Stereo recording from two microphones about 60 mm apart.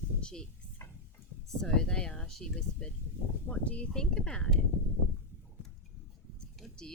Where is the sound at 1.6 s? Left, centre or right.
Centre.